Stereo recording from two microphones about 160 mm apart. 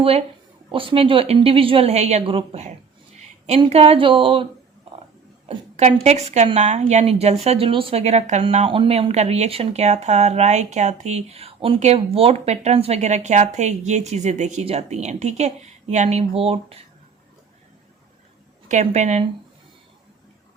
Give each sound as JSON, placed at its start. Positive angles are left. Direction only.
{"t": 0.7, "sound": "a woman's voice", "side_deg": -35}
{"t": 3.2, "sound": "a sound", "side_deg": -45}
{"t": 3.7, "sound": "a woman's voice", "side_deg": -40}
{"t": 4.9, "sound": "a sound", "side_deg": -35}
{"t": 5.5, "sound": "speech", "side_deg": -45}
{"t": 18.7, "sound": "speech", "side_deg": -45}